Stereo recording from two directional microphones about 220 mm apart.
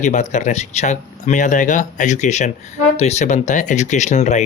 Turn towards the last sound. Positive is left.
turn(degrees=30)  # may be behind; listen again after turning